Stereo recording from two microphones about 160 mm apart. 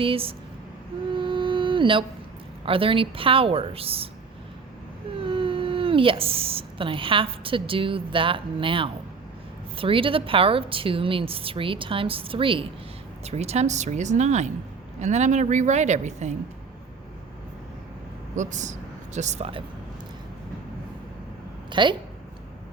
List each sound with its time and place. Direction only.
0.0 s a woman's voice: 35° right (ahead or behind)
1.1 s music: 30° right (ahead or behind)
2.6 s a woman's voice: 35° right (ahead or behind)
5.2 s a woman's voice: 35° right (ahead or behind)
18.3 s speech: 50° right (ahead or behind)
21.7 s a woman's voice: 30° right (ahead or behind)